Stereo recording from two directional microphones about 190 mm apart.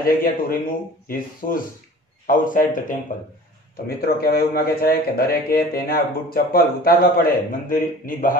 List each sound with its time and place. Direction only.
0.0 s a man's voice: 50° left (ahead or behind)